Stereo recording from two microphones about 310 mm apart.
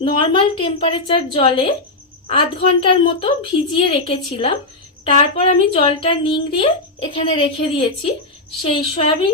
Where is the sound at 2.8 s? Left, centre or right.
Centre.